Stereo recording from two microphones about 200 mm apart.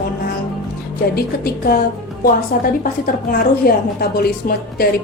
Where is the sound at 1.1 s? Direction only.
50° left (ahead or behind).